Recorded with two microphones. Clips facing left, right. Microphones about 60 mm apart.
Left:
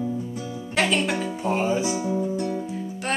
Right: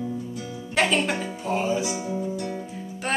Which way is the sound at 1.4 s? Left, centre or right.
Left.